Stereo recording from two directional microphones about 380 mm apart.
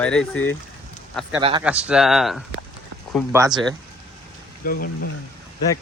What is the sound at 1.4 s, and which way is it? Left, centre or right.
Speech, centre.